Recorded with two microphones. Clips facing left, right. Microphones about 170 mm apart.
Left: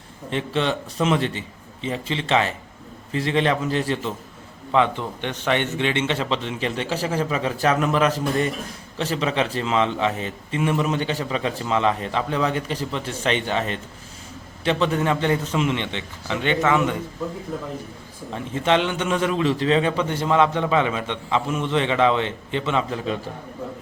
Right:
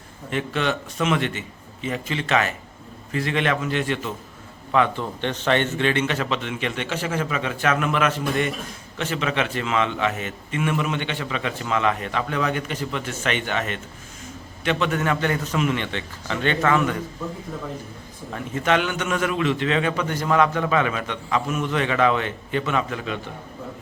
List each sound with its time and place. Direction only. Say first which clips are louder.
0.3 s a man's voice: left 1 dB; 30° left (ahead or behind)
4.7 s a man's voice: left 1 dB; 20° left (ahead or behind)
5.2 s a man's voice: right 2 dB; 10° left (ahead or behind)
18.3 s a man's voice: left 1 dB; 25° left (ahead or behind)